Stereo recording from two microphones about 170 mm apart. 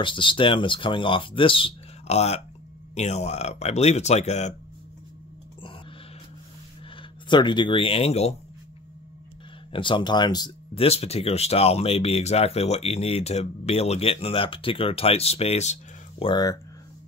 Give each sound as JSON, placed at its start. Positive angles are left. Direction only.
{"t": 0.0, "sound": "speech", "side_deg": 30}
{"t": 7.0, "sound": "speech", "side_deg": 25}
{"t": 9.7, "sound": "speech", "side_deg": 30}
{"t": 16.3, "sound": "speech", "side_deg": 20}